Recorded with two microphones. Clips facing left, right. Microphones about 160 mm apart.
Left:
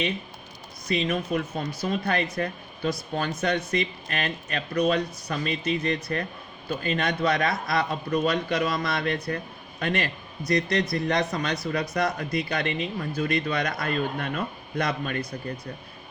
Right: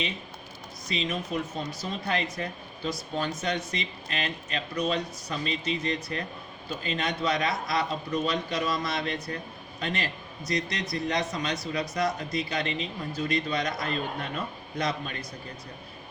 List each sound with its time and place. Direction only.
0.9 s a man's voice: 55° left (ahead or behind)